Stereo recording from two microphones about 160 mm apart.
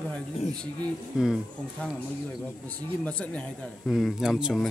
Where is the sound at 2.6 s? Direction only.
10° left (ahead or behind).